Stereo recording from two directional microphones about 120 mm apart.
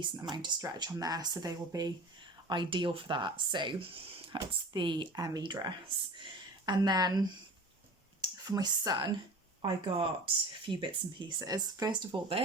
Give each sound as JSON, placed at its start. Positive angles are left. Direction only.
{"t": 0.0, "sound": "speech", "side_deg": -35}
{"t": 2.5, "sound": "speech", "side_deg": -40}
{"t": 8.4, "sound": "speech", "side_deg": -35}